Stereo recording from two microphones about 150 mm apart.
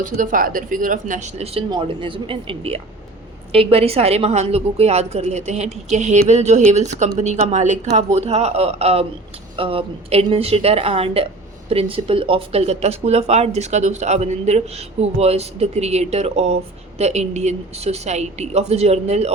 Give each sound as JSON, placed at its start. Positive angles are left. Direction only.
{"t": 0.0, "sound": "speech", "side_deg": -60}
{"t": 1.7, "sound": "a woman's voice", "side_deg": -35}